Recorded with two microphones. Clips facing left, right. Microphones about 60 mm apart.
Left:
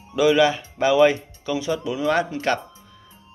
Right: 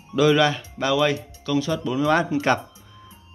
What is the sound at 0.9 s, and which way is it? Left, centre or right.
Speech, centre.